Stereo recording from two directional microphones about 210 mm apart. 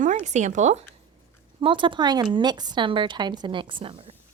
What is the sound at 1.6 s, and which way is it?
Speech, 25° right (ahead or behind).